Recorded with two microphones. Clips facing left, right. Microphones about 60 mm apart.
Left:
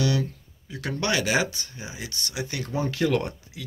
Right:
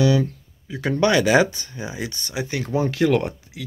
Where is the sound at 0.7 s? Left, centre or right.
Right.